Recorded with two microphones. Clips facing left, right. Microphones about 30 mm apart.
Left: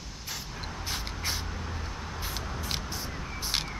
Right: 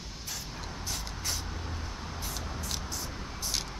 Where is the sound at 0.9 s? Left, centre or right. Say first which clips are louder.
Left 3 dB; left.